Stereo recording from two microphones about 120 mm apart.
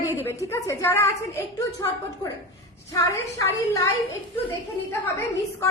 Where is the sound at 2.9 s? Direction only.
30° left (ahead or behind).